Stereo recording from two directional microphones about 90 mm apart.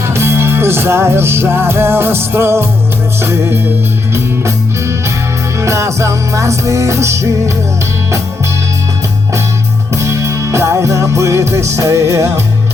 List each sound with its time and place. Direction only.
0.1 s music: 30° right (ahead or behind)
9.9 s music: 35° right (ahead or behind)